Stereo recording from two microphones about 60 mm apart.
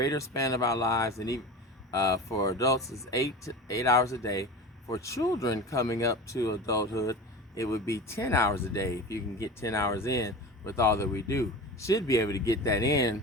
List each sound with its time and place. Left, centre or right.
0.0 s speech: left